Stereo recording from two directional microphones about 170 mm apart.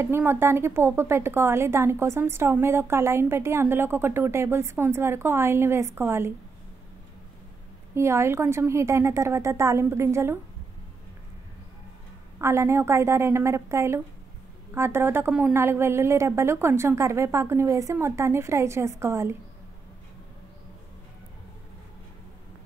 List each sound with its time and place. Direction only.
0.0 s a woman's voice: 15° right (ahead or behind)
7.9 s a woman's voice: 15° right (ahead or behind)
12.4 s a woman's voice: 15° right (ahead or behind)